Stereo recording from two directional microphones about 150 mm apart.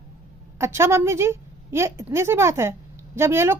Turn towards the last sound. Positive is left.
turn(degrees=-15)  # may be behind; listen again after turning